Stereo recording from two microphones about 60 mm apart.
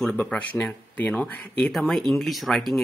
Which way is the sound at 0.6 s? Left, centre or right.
Left.